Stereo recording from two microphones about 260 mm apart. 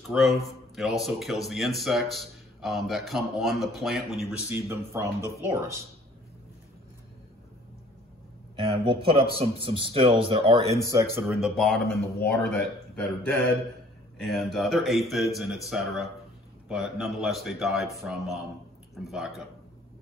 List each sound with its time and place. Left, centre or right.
0.0 s speech: centre
8.5 s a man's voice: centre
11.1 s speech: centre